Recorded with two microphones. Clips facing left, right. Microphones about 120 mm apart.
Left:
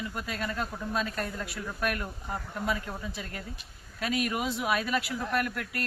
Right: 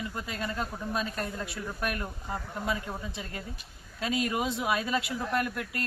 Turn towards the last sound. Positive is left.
turn(degrees=-25)  # may be behind; listen again after turning